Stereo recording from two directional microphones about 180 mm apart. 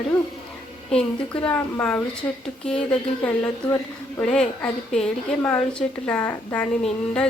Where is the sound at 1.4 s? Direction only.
10° left (ahead or behind).